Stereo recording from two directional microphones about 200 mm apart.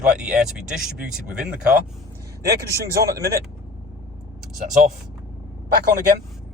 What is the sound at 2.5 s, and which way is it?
Speech, 50° right (ahead or behind).